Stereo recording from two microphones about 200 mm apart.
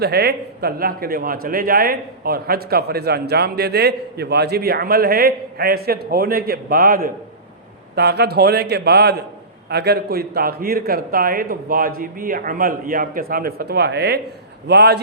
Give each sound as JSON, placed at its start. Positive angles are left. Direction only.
{"t": 0.0, "sound": "a man's voice", "side_deg": -55}